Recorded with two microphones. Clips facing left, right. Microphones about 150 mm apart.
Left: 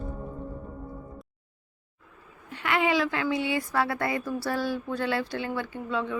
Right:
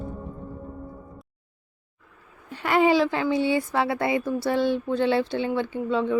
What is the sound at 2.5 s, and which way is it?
Speech, 35° right (ahead or behind).